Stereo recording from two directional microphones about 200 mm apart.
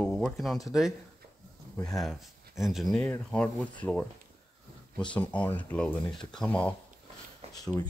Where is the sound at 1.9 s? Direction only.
Centre (ahead or behind).